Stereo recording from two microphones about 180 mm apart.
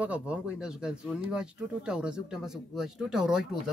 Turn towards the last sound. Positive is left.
turn(degrees=-5)  # may be behind; listen again after turning